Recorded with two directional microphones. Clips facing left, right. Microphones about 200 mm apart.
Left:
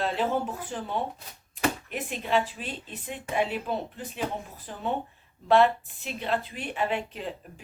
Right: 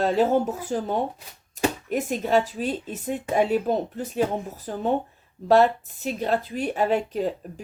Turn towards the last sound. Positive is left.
turn(degrees=-40)  # may be behind; listen again after turning